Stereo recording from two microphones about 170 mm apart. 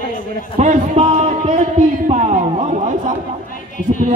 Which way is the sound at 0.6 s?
40° right (ahead or behind).